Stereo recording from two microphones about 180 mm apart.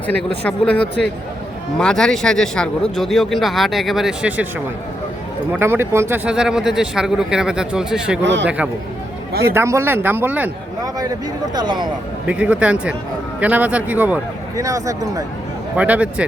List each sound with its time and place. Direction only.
0.1 s speech: 5° left (ahead or behind)
5.5 s speech: 10° right (ahead or behind)
8.2 s speech: 85° right
8.4 s speech: 5° right (ahead or behind)
11.5 s speech: 25° right (ahead or behind)
12.2 s speech: 5° right (ahead or behind)
15.7 s speech: 5° right (ahead or behind)